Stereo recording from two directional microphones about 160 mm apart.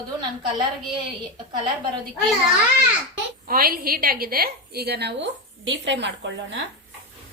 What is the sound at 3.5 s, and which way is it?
A woman's voice, 65° right (ahead or behind).